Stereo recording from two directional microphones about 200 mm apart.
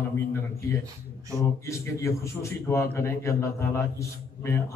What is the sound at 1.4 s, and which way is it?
A man's voice, 15° left (ahead or behind).